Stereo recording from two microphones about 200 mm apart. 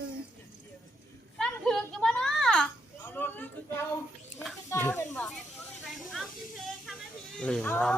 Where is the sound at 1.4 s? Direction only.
5° left (ahead or behind).